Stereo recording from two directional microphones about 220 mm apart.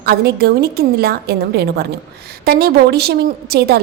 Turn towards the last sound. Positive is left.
turn(degrees=-45)  # may be behind; listen again after turning